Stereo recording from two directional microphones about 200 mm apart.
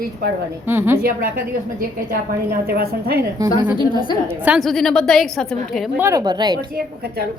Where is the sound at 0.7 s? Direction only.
10° right (ahead or behind).